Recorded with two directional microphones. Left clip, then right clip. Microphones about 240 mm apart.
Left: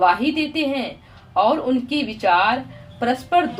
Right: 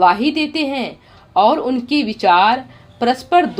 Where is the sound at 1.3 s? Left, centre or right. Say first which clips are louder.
Right 4 dB; right.